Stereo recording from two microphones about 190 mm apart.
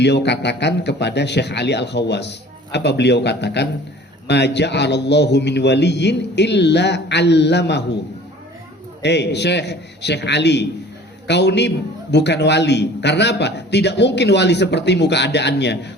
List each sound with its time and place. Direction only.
0.0 s a man's voice: 65° left (ahead or behind)
9.0 s a man's voice: 65° left (ahead or behind)